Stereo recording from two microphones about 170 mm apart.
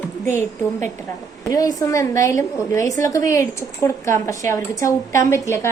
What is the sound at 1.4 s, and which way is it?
A woman's voice, 20° left (ahead or behind).